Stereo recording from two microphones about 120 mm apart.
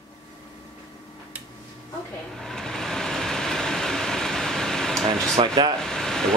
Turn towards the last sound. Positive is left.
turn(degrees=5)  # may be behind; listen again after turning